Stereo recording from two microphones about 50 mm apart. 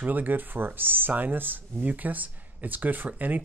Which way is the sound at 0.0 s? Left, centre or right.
Right.